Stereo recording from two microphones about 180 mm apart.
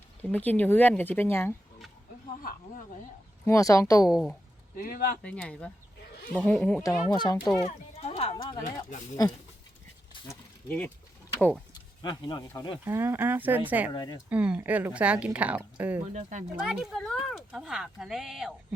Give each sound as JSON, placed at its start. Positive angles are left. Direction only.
{"t": 0.2, "sound": "speech", "side_deg": 10}
{"t": 2.4, "sound": "speech", "side_deg": 50}
{"t": 3.4, "sound": "speech", "side_deg": 15}
{"t": 4.0, "sound": "speech", "side_deg": 0}
{"t": 4.8, "sound": "speech", "side_deg": 55}
{"t": 5.2, "sound": "speech", "side_deg": 5}
{"t": 7.1, "sound": "speech", "side_deg": 20}
{"t": 7.6, "sound": "a sound", "side_deg": 35}
{"t": 8.4, "sound": "speech", "side_deg": 15}
{"t": 12.0, "sound": "speech", "side_deg": 25}
{"t": 12.8, "sound": "speech", "side_deg": -10}
{"t": 13.9, "sound": "speech", "side_deg": 25}
{"t": 14.3, "sound": "speech", "side_deg": -5}